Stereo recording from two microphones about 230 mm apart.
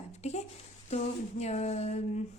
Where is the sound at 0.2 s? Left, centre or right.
Left.